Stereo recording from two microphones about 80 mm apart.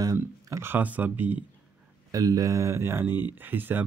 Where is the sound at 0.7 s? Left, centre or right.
Right.